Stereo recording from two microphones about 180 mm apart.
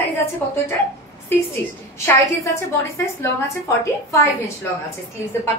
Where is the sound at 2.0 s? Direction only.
15° left (ahead or behind).